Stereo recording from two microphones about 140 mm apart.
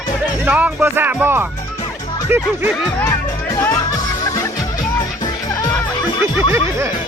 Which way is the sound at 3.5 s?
25° left (ahead or behind).